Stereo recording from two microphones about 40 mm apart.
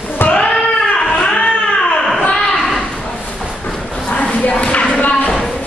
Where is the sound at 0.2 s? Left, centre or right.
Left.